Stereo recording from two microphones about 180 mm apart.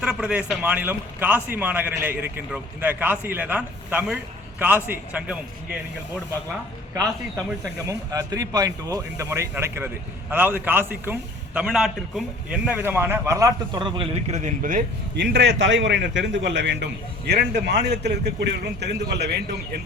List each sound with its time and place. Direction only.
0.0 s speech: 5° right (ahead or behind)
7.6 s speech: 20° right (ahead or behind)
14.3 s speech: 40° right (ahead or behind)
15.1 s a man's voice: 75° right (ahead or behind)